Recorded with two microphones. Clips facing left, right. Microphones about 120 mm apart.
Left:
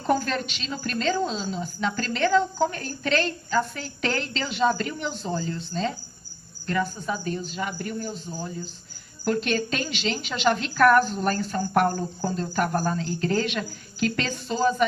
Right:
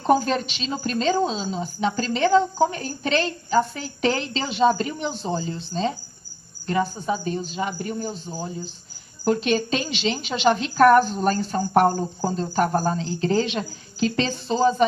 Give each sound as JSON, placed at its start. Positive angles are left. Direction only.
{"t": 0.0, "sound": "a woman's voice", "side_deg": -20}
{"t": 7.0, "sound": "a woman's voice", "side_deg": -20}
{"t": 9.2, "sound": "a woman's voice", "side_deg": -20}